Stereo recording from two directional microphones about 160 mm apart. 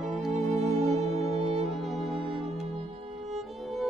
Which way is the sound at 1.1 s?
40° right (ahead or behind).